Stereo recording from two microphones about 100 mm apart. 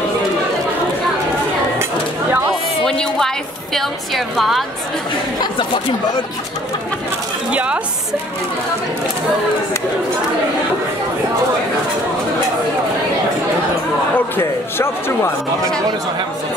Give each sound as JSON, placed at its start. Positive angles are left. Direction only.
{"t": 2.8, "sound": "a sound", "side_deg": 5}
{"t": 3.7, "sound": "a woman's voice", "side_deg": 0}
{"t": 7.5, "sound": "speech", "side_deg": -10}
{"t": 14.1, "sound": "speech", "side_deg": 20}